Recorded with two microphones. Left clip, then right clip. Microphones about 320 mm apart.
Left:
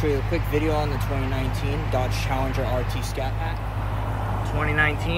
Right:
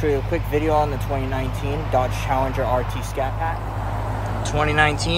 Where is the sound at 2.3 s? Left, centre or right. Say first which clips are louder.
Right 7 dB; right.